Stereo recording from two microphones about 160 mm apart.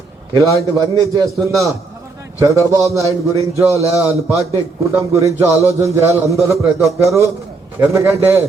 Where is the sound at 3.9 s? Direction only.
20° left (ahead or behind).